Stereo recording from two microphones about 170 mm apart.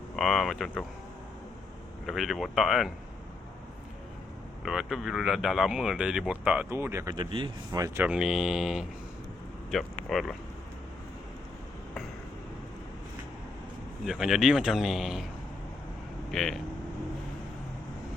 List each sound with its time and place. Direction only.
0.2 s speech: centre (ahead or behind)
2.0 s speech: centre (ahead or behind)
4.6 s speech: centre (ahead or behind); by 8.0 s 20° right (ahead or behind)
8.0 s speech: 5° right (ahead or behind)
14.0 s speech: centre (ahead or behind)
16.3 s speech: centre (ahead or behind)